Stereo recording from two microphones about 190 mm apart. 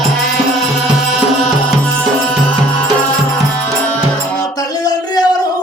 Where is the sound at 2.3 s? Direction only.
5° left (ahead or behind).